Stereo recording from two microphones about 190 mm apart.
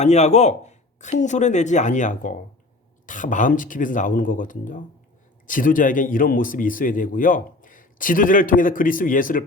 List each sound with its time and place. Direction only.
0.0 s a man's voice: 35° left (ahead or behind)